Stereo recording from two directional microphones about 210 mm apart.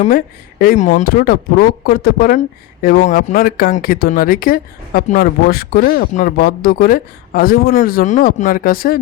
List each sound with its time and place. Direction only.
0.6 s speech: 40° left (ahead or behind)